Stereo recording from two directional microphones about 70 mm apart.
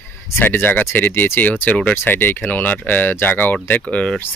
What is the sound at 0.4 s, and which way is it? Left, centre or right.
Speech, left.